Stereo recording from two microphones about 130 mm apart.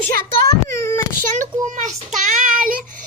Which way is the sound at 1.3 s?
80° right.